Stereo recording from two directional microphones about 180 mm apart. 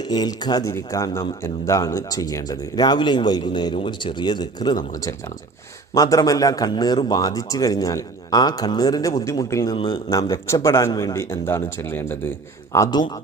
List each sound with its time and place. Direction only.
0.1 s speech: 20° left (ahead or behind)
5.9 s speech: 20° left (ahead or behind)